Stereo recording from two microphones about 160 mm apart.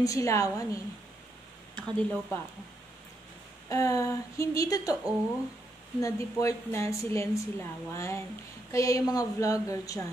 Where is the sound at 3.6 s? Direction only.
20° left (ahead or behind).